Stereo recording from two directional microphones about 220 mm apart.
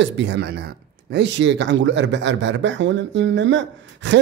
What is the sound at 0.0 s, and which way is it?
Speech, 50° right (ahead or behind).